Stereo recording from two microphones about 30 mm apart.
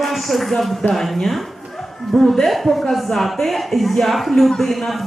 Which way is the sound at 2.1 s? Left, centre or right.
Centre.